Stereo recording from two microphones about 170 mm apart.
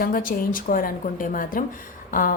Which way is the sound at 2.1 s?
55° left (ahead or behind).